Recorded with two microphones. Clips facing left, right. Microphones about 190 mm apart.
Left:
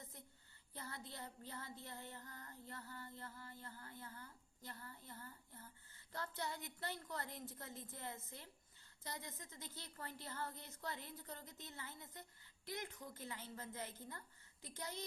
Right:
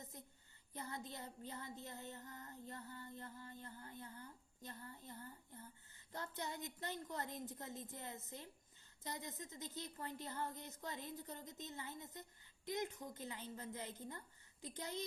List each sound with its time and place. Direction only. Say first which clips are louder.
0.0 s a sound: right 3 dB; 20° right (ahead or behind)
0.7 s child singing: right 4 dB; 20° right (ahead or behind)
9.0 s a woman's voice: right 3 dB; 20° right (ahead or behind)
12.6 s child singing: right 5 dB; 20° right (ahead or behind)